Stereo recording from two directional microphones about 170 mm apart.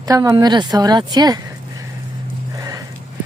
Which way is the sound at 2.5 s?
20° right (ahead or behind).